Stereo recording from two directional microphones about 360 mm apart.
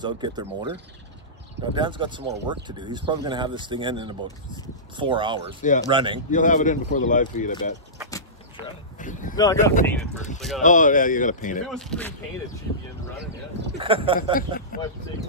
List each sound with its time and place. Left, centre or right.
0.0 s speech: centre
6.3 s speech: left
8.1 s vehicle: centre
9.4 s speech: centre
10.6 s speech: left
11.7 s speech: centre
13.7 s speech: centre
14.7 s speech: left